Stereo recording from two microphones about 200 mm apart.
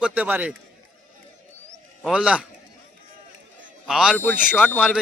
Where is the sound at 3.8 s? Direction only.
5° right (ahead or behind).